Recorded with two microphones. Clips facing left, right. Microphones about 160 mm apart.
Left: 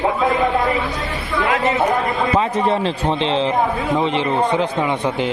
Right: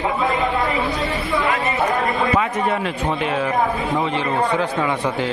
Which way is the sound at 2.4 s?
30° left (ahead or behind).